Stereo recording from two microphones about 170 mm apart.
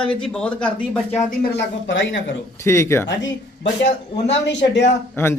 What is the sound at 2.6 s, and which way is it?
Speech, 15° left (ahead or behind).